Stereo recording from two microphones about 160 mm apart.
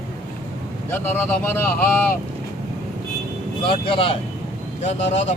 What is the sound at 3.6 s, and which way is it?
Speech, 35° left (ahead or behind).